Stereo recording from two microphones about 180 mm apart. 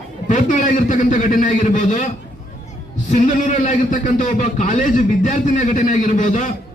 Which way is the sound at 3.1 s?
40° left (ahead or behind).